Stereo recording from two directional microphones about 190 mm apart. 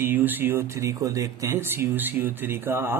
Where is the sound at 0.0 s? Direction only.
10° right (ahead or behind).